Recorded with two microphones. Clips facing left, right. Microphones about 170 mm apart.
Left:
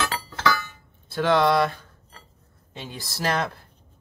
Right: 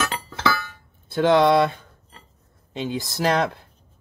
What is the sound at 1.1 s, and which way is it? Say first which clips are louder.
Cutlery: right 4 dB; 20° right (ahead or behind).